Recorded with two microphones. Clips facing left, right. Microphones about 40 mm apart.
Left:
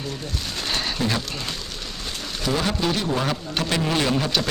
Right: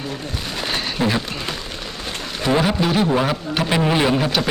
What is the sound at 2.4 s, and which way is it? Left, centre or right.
A man's voice, right.